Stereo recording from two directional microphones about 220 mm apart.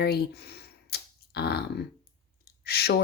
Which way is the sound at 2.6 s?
45° left (ahead or behind).